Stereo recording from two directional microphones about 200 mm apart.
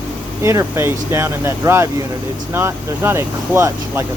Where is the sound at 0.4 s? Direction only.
15° right (ahead or behind).